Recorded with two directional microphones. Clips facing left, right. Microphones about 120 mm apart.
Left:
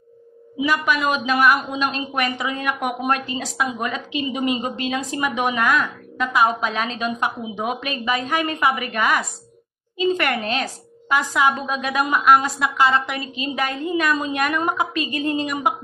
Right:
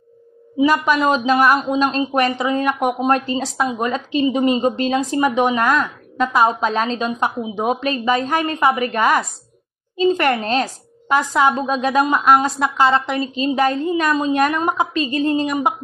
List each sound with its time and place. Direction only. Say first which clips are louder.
0.6 s a woman's voice: right 5 dB; 35° right (ahead or behind)